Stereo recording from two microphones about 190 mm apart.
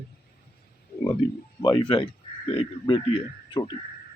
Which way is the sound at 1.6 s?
25° left (ahead or behind).